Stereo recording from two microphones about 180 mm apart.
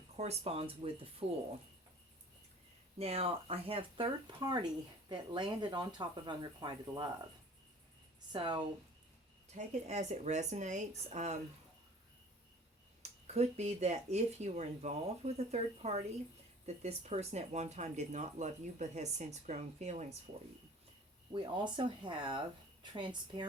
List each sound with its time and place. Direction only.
0.2 s speech: 35° right (ahead or behind)
3.0 s speech: 35° right (ahead or behind)
8.3 s speech: 25° right (ahead or behind)
9.6 s speech: 40° right (ahead or behind)
13.0 s speech: 35° right (ahead or behind)
21.3 s speech: 25° right (ahead or behind)